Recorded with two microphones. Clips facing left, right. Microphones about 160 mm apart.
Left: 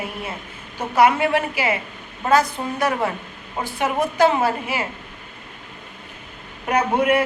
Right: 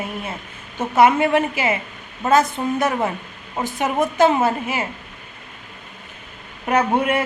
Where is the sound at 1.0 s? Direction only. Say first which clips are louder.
Right 2 dB; 25° right (ahead or behind).